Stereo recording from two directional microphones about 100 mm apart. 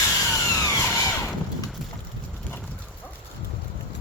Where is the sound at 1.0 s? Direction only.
25° left (ahead or behind).